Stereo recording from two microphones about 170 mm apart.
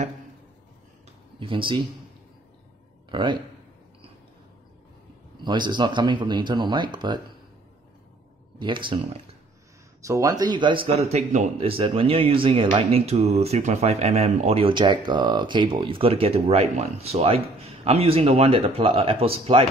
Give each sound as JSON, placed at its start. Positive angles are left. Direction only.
{"t": 1.4, "sound": "speech", "side_deg": -30}
{"t": 3.1, "sound": "speech", "side_deg": -30}
{"t": 5.4, "sound": "speech", "side_deg": -25}
{"t": 8.5, "sound": "speech", "side_deg": -30}
{"t": 10.0, "sound": "speech", "side_deg": -20}